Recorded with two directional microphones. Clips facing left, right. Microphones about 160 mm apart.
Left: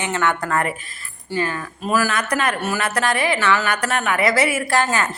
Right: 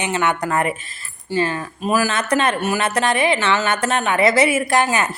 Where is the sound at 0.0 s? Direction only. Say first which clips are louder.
Right 1 dB; 20° right (ahead or behind).